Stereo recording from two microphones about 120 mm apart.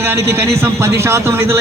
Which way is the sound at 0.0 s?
20° right (ahead or behind).